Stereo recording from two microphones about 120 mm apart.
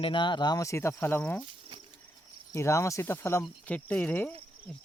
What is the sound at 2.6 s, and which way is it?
Speech, 25° left (ahead or behind).